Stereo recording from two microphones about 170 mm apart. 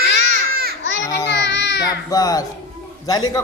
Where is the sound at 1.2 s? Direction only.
90° left.